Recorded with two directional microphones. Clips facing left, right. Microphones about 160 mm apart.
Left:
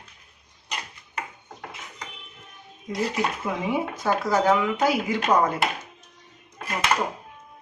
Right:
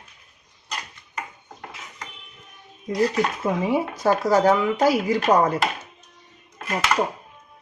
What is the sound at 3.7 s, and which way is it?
Speech, 40° right (ahead or behind).